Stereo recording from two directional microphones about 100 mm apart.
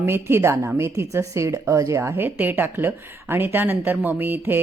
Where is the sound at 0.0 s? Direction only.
25° right (ahead or behind).